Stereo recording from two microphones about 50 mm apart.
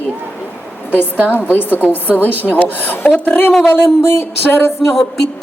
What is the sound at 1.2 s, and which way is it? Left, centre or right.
A woman's voice, left.